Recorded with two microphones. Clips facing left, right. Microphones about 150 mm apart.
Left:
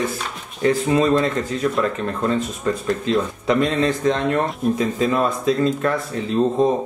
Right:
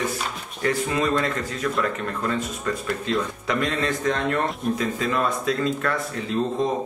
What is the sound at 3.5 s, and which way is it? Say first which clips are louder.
Speech: left 7 dB; 25° left (ahead or behind).